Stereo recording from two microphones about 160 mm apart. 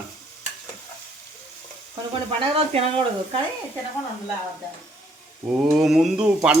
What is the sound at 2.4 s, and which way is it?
Speech, 35° right (ahead or behind).